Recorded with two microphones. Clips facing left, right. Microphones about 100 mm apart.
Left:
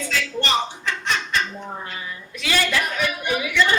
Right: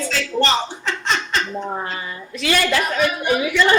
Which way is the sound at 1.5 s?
90° right.